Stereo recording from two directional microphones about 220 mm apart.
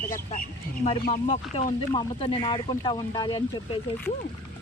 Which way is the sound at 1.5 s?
25° left (ahead or behind).